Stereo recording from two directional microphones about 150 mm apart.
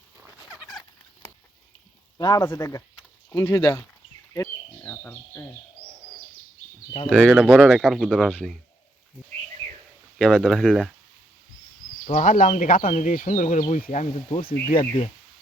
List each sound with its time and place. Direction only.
0.7 s a sound: centre (ahead or behind)
2.1 s speech: 25° left (ahead or behind)
4.4 s bird: 10° left (ahead or behind)
7.1 s speech: 10° left (ahead or behind)
7.3 s speech: 5° right (ahead or behind)
8.3 s speech: 10° left (ahead or behind)
10.2 s speech: 5° left (ahead or behind)
12.0 s speech: 55° left (ahead or behind)
14.4 s speech: 70° left (ahead or behind)